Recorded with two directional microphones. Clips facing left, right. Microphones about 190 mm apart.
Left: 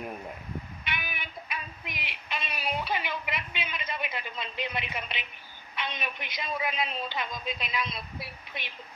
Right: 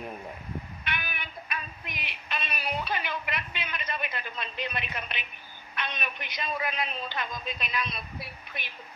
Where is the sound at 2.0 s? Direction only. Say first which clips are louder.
Right 1 dB; 20° left (ahead or behind).